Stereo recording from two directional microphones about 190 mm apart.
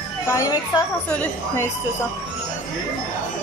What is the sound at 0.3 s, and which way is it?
Speech, 20° left (ahead or behind).